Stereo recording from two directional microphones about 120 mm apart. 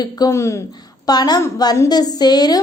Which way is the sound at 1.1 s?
35° left (ahead or behind).